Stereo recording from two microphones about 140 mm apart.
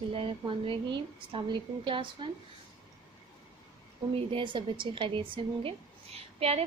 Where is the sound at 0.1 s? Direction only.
40° right (ahead or behind).